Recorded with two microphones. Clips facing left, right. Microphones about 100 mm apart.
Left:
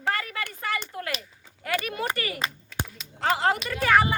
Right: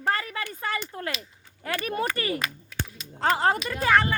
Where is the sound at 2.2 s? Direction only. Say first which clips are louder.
Right 2 dB; 30° right (ahead or behind).